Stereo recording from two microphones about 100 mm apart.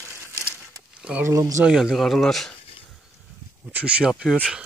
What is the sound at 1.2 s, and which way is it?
Speech, 30° right (ahead or behind).